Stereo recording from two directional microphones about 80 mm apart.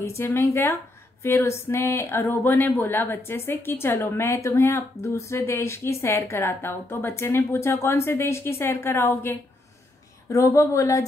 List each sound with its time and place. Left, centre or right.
0.0 s speech: left
10.3 s speech: left